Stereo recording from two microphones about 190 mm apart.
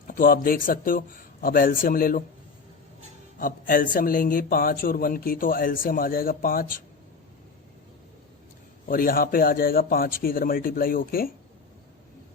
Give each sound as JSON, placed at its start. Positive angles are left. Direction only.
{"t": 0.1, "sound": "a man's voice", "side_deg": 50}
{"t": 3.3, "sound": "a man's voice", "side_deg": 45}
{"t": 8.9, "sound": "a man's voice", "side_deg": 50}